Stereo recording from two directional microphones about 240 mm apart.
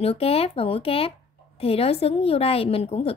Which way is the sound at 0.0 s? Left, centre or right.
Left.